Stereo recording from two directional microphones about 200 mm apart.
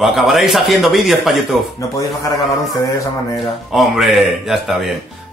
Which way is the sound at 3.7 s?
Centre (ahead or behind).